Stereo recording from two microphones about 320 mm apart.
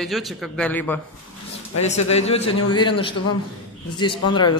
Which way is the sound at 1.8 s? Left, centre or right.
Centre.